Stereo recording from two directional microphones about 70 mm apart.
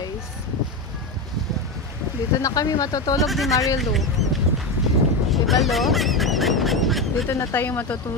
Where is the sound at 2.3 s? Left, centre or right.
Left.